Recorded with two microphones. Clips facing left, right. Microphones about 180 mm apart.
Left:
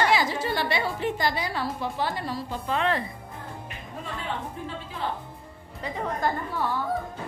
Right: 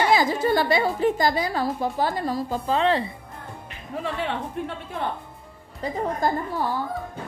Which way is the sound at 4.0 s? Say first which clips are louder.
Right 6 dB; 85° right.